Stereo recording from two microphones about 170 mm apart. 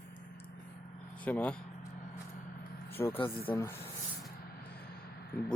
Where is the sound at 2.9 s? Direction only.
10° left (ahead or behind).